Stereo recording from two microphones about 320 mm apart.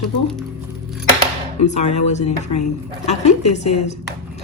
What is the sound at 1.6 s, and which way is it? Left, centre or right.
A woman's voice, left.